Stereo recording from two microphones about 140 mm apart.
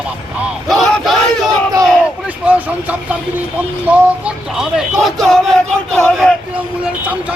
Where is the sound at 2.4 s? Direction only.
10° right (ahead or behind).